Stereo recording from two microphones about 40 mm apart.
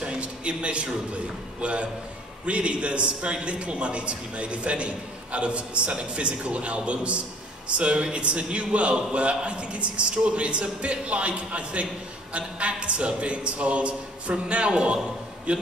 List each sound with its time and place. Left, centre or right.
0.0 s a man's voice: right